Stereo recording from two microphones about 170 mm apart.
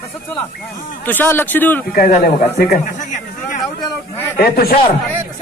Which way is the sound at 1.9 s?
60° left (ahead or behind).